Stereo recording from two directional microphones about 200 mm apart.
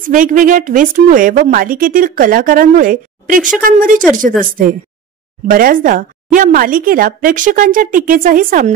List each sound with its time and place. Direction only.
0.0 s a woman's voice: 40° right (ahead or behind)
5.5 s a woman's voice: 45° right (ahead or behind)